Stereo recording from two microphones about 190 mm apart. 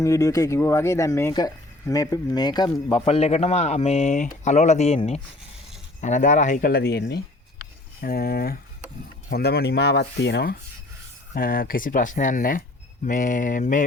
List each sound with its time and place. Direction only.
0.0 s speech: 15° left (ahead or behind); by 10.6 s 60° left (ahead or behind)
11.3 s speech: 50° left (ahead or behind)